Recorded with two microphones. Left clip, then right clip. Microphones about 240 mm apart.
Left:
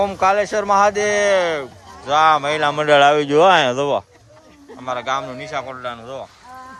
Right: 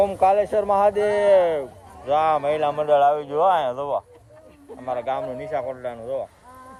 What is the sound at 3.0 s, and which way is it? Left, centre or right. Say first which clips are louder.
Speech: left 6 dB; left.